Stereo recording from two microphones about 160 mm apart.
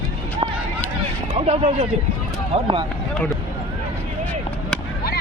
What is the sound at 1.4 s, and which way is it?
Speech, 40° right (ahead or behind).